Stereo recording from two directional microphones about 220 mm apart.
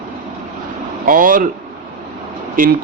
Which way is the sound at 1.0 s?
40° right (ahead or behind).